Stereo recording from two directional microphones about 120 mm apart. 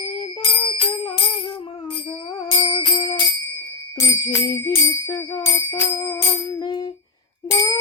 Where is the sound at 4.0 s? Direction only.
25° left (ahead or behind).